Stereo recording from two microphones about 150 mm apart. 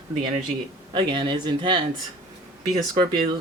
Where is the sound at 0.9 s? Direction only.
30° right (ahead or behind).